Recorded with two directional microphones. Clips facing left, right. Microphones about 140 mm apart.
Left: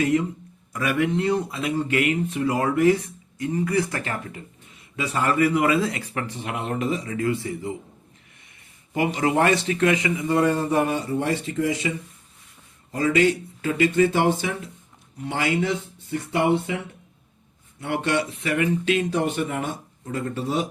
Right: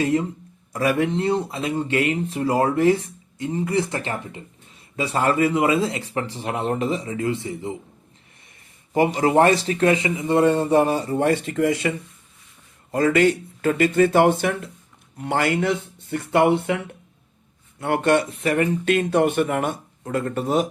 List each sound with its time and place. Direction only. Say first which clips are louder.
0.0 s speech: even; 30° right (ahead or behind)
8.9 s speech: right 4 dB; 35° right (ahead or behind)
11.2 s speech: right 4 dB; 55° right (ahead or behind)
17.7 s speech: right 5 dB; 50° right (ahead or behind)